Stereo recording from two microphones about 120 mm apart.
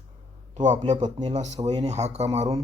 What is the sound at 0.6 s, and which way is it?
Speech, 75° right (ahead or behind).